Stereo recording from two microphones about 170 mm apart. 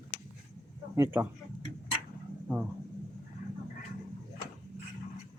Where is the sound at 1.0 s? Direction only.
10° right (ahead or behind).